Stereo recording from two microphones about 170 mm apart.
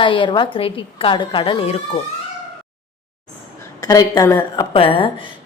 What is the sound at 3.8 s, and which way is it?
A woman's voice, 20° left (ahead or behind).